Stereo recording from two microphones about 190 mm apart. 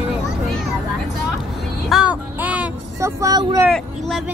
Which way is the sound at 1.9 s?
5° right (ahead or behind).